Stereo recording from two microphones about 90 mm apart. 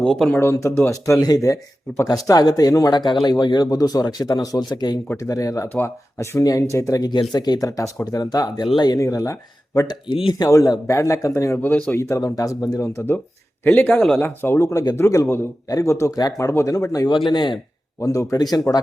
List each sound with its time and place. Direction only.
0.0 s speech: 10° left (ahead or behind)
0.3 s speech: 30° left (ahead or behind)
7.1 s speech: 50° left (ahead or behind)
9.9 s speech: 70° left (ahead or behind)
10.3 s speech: 40° left (ahead or behind)
11.5 s speech: 20° left (ahead or behind)
11.9 s speech: 35° left (ahead or behind)
13.8 s speech: 5° left (ahead or behind)
14.2 s speech: 20° left (ahead or behind); by 17.1 s 40° left (ahead or behind)
17.2 s speech: 60° left (ahead or behind)
18.0 s speech: 40° left (ahead or behind)